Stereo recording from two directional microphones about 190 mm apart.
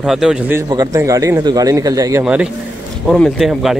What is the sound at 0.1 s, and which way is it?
Speech, 5° right (ahead or behind).